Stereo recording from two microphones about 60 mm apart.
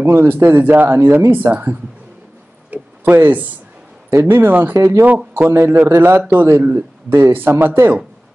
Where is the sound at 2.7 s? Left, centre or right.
Right.